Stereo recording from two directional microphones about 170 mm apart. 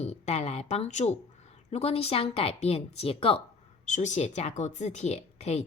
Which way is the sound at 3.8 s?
45° left (ahead or behind).